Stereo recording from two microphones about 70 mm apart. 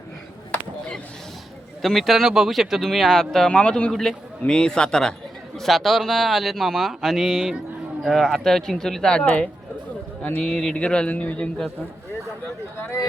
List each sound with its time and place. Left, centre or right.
0.5 s a sound: centre
1.8 s a man's voice: centre
3.5 s a man's voice: centre